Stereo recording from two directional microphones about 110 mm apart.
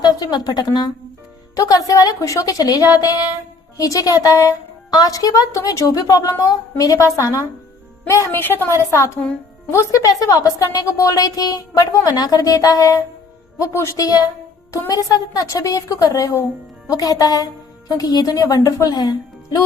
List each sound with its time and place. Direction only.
0.0 s a woman's voice: 40° left (ahead or behind)